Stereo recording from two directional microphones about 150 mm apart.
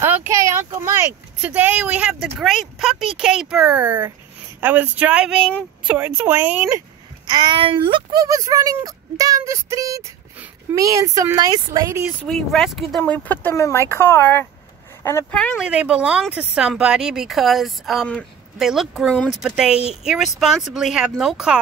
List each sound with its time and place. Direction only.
0.0 s speech: 15° right (ahead or behind)
7.2 s speech: 30° right (ahead or behind)
12.3 s speech: centre (ahead or behind)
13.0 s speech: 10° left (ahead or behind)
15.6 s speech: 5° right (ahead or behind)